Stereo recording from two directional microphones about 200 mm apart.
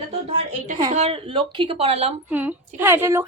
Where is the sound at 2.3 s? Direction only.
10° right (ahead or behind).